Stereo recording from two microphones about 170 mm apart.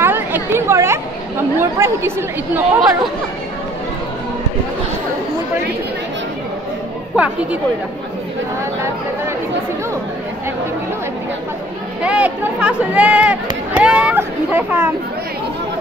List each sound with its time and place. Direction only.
0.0 s chatter: 10° right (ahead or behind)
1.6 s speech: 15° right (ahead or behind)
7.2 s speech: 10° right (ahead or behind)
12.0 s speech: 5° right (ahead or behind)